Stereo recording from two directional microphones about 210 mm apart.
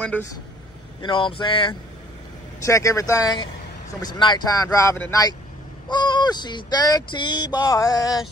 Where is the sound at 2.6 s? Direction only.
15° left (ahead or behind).